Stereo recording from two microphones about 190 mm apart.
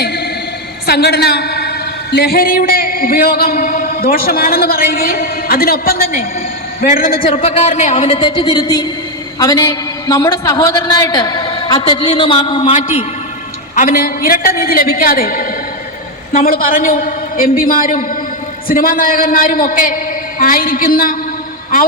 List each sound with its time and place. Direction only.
0.0 s a sound: 55° left (ahead or behind)
0.9 s a man's voice: 55° left (ahead or behind)
7.3 s a woman's voice: 35° left (ahead or behind)
13.7 s a man's voice: 45° left (ahead or behind)